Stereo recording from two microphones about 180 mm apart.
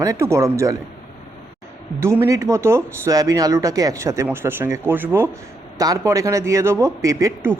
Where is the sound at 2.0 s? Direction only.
15° right (ahead or behind).